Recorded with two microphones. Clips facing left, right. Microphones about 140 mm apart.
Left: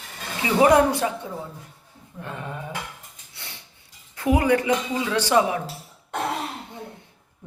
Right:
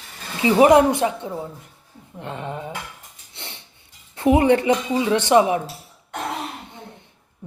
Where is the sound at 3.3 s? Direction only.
25° right (ahead or behind).